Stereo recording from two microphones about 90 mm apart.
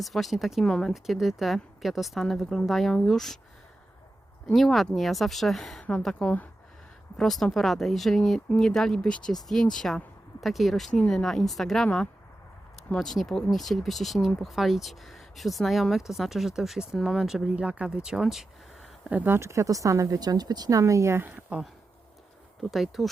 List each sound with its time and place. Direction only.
0.0 s speech: centre (ahead or behind)
4.5 s speech: centre (ahead or behind)
19.1 s speech: 20° right (ahead or behind)
22.7 s speech: centre (ahead or behind)